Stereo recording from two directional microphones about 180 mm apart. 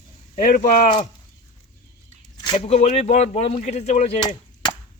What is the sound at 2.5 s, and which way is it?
Speech, 35° left (ahead or behind).